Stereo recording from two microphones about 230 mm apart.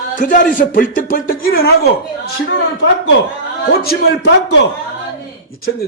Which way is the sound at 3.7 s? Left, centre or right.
Left.